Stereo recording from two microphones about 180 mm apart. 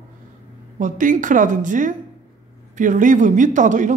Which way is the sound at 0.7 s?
45° right (ahead or behind).